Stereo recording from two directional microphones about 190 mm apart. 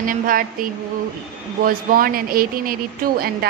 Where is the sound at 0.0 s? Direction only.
45° right (ahead or behind).